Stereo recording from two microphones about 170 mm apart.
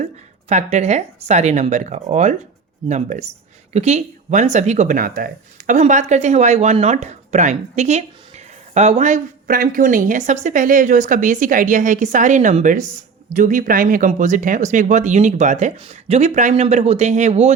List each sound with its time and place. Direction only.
0.0 s speech: 45° right (ahead or behind)